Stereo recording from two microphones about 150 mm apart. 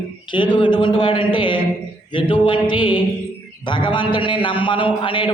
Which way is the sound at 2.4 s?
35° left (ahead or behind).